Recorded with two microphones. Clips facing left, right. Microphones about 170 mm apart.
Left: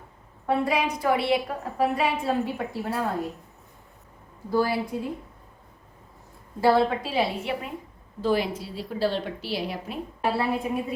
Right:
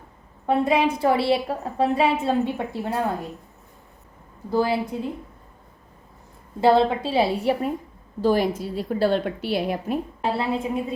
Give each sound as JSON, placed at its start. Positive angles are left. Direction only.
{"t": 0.4, "sound": "a woman's voice", "side_deg": -25}
{"t": 4.5, "sound": "a woman's voice", "side_deg": -20}
{"t": 6.6, "sound": "a woman's voice", "side_deg": -25}
{"t": 8.2, "sound": "a woman's voice", "side_deg": -45}
{"t": 10.2, "sound": "a woman's voice", "side_deg": -20}